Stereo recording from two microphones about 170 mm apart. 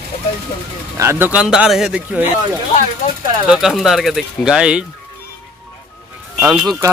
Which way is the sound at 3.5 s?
Centre (ahead or behind).